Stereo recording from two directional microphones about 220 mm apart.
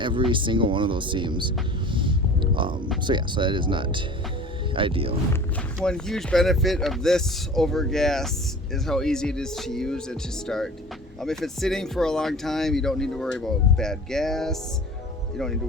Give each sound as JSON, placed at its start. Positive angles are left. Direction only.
{"t": 0.0, "sound": "speech", "side_deg": -20}
{"t": 5.8, "sound": "speech", "side_deg": 5}